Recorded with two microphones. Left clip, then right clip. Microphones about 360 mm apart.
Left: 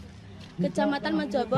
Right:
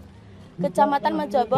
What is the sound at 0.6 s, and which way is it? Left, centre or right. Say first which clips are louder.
Speech: right 8 dB; centre.